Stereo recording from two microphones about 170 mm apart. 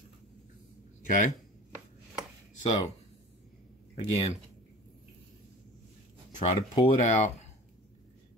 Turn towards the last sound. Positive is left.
turn(degrees=45)  # may be behind; listen again after turning